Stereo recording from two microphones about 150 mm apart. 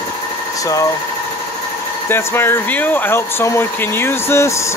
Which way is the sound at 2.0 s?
15° left (ahead or behind).